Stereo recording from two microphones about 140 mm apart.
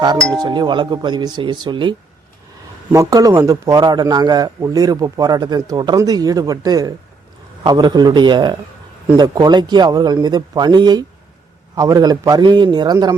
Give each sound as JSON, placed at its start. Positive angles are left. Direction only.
{"t": 0.3, "sound": "a man's voice", "side_deg": -30}
{"t": 2.9, "sound": "a man's voice", "side_deg": -25}